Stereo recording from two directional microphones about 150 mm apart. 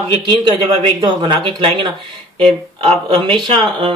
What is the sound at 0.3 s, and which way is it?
A man's voice, 30° right (ahead or behind).